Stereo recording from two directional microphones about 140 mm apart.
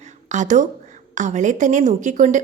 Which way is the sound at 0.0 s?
60° right (ahead or behind).